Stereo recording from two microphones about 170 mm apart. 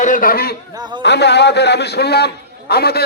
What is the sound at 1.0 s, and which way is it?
A man's voice, 85° left.